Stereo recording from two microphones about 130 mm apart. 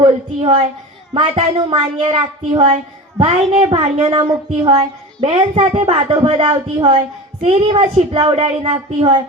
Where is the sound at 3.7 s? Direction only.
40° right (ahead or behind).